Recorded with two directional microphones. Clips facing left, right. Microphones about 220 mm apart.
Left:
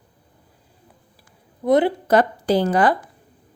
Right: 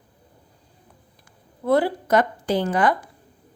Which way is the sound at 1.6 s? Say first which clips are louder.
Left 3 dB; 20° left (ahead or behind).